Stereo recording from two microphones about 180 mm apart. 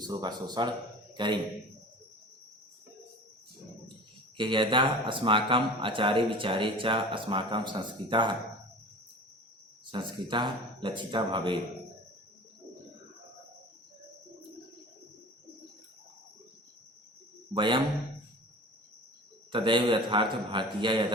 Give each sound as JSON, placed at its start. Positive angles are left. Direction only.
{"t": 0.0, "sound": "a man's voice", "side_deg": -25}
{"t": 4.4, "sound": "speech", "side_deg": -25}
{"t": 9.8, "sound": "speech", "side_deg": -25}
{"t": 17.5, "sound": "speech", "side_deg": -25}
{"t": 19.5, "sound": "speech", "side_deg": -25}